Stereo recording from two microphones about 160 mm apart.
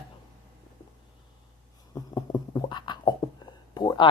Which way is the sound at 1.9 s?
20° left (ahead or behind).